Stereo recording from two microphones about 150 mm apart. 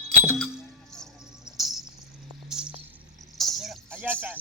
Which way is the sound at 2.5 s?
5° right (ahead or behind).